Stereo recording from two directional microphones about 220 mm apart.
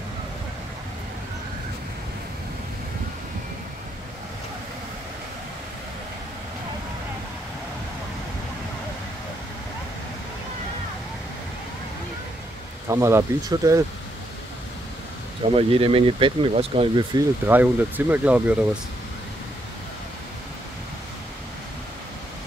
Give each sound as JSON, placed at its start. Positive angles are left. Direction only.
{"t": 12.8, "sound": "speech", "side_deg": -15}
{"t": 15.5, "sound": "speech", "side_deg": -25}
{"t": 17.5, "sound": "speech", "side_deg": -10}